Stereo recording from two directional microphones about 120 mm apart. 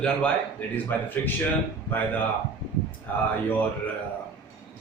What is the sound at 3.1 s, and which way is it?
Speech, 15° left (ahead or behind).